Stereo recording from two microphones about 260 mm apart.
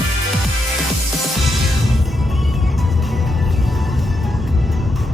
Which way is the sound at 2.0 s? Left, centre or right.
Centre.